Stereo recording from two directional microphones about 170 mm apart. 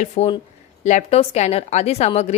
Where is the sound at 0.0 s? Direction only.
40° left (ahead or behind).